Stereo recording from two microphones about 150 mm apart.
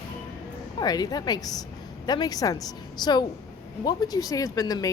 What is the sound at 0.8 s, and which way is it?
Speech, 25° left (ahead or behind).